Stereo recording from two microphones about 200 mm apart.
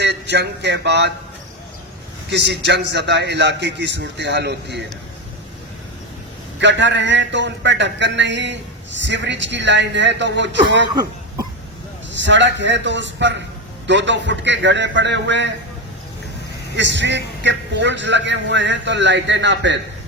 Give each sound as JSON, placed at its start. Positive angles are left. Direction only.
{"t": 0.0, "sound": "speech", "side_deg": -55}
{"t": 2.3, "sound": "a man's voice", "side_deg": -60}
{"t": 6.6, "sound": "a man's voice", "side_deg": -65}
{"t": 12.1, "sound": "a man's voice", "side_deg": -65}
{"t": 16.7, "sound": "a man's voice", "side_deg": -65}